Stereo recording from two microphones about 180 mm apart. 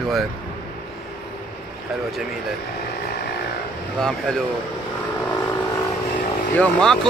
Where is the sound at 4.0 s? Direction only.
Centre (ahead or behind).